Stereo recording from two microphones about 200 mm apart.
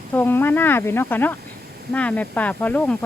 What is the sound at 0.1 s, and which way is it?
Speech, 10° left (ahead or behind).